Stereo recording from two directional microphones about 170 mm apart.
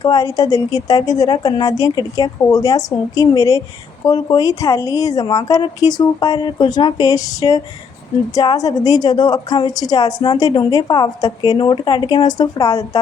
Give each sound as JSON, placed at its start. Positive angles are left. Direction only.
{"t": 0.0, "sound": "a woman's voice", "side_deg": 20}